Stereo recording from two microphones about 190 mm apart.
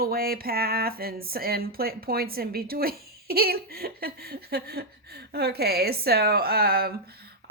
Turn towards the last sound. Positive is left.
turn(degrees=-55)  # may be behind; listen again after turning